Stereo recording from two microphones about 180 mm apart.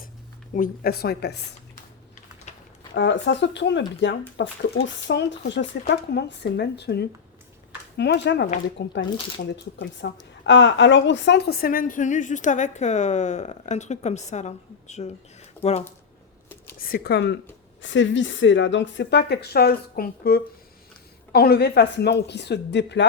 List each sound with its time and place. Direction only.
0.5 s speech: 55° left (ahead or behind)
2.9 s speech: 75° left (ahead or behind)
9.8 s a woman's voice: 90° left; by 15.8 s 35° left (ahead or behind)
16.7 s speech: 60° left (ahead or behind)
17.8 s a woman's voice: 90° left